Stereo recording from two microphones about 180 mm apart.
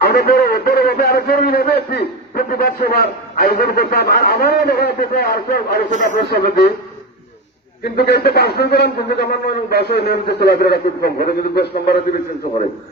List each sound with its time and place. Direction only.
0.0 s a man's voice: 60° left (ahead or behind)
7.9 s a man's voice: 65° left (ahead or behind)